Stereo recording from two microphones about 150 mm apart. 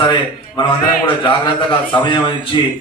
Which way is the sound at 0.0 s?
30° left (ahead or behind).